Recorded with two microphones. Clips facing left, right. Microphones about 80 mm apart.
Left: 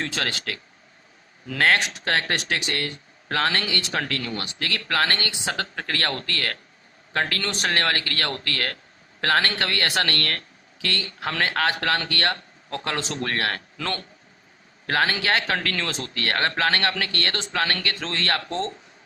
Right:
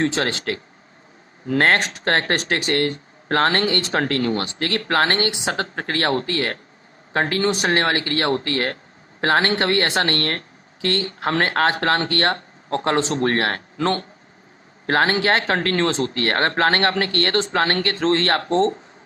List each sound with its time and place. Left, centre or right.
0.0 s speech: right